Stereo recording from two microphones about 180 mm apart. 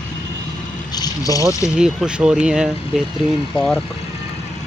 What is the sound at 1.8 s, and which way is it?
Speech, 5° right (ahead or behind).